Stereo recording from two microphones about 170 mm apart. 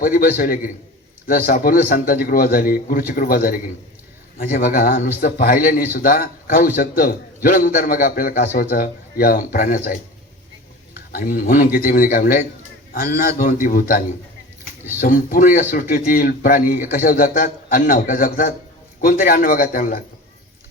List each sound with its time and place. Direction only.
0.0 s a man's voice: 55° left (ahead or behind)
11.1 s a man's voice: 60° left (ahead or behind)